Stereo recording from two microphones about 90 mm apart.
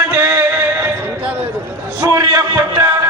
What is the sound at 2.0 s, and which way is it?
Speech, 40° right (ahead or behind).